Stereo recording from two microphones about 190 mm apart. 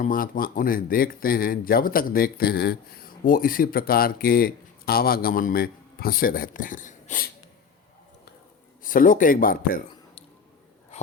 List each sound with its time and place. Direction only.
0.0 s speech: 50° left (ahead or behind)
8.8 s speech: 45° left (ahead or behind)
10.9 s a sound: 35° left (ahead or behind)